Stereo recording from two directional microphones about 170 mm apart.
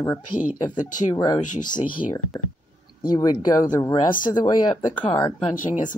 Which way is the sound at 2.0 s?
35° left (ahead or behind).